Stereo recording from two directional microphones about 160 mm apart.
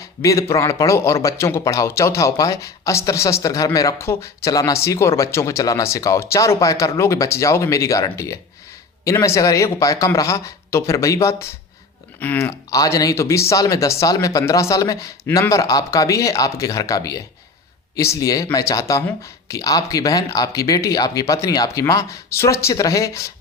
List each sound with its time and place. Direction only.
0.0 s speech: 20° left (ahead or behind)